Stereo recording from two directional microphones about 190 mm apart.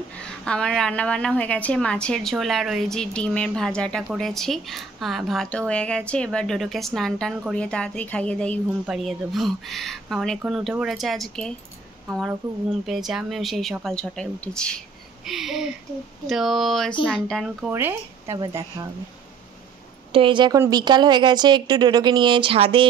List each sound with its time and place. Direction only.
0.2 s a woman's voice: 5° left (ahead or behind)
17.6 s speech: 10° right (ahead or behind)
20.1 s a woman's voice: 25° right (ahead or behind)